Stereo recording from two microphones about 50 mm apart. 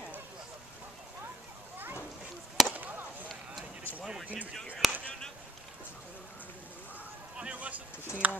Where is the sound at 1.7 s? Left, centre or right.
Right.